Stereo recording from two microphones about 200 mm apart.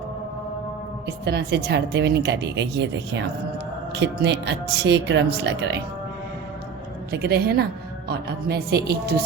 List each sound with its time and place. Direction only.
1.0 s a woman's voice: 55° right (ahead or behind)
7.1 s a woman's voice: 50° right (ahead or behind)